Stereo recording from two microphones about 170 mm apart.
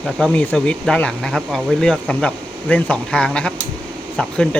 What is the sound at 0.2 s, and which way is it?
Speech, 5° left (ahead or behind).